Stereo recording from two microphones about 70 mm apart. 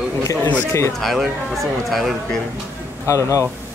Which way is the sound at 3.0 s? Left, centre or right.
Left.